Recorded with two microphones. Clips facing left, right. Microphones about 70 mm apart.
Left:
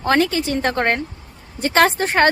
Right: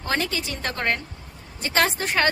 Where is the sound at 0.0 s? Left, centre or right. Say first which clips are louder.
Left 9 dB; left.